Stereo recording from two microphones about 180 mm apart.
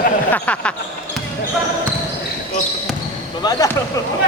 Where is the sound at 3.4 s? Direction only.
20° left (ahead or behind).